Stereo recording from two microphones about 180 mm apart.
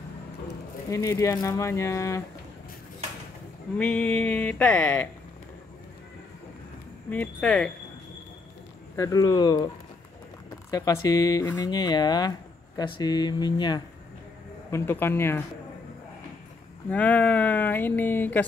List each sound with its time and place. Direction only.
0.8 s speech: 20° left (ahead or behind)
3.7 s speech: 5° left (ahead or behind)
7.1 s speech: 10° left (ahead or behind)
8.9 s speech: 20° left (ahead or behind)
10.7 s speech: 20° left (ahead or behind)
14.7 s speech: 15° left (ahead or behind)
16.9 s speech: 10° left (ahead or behind)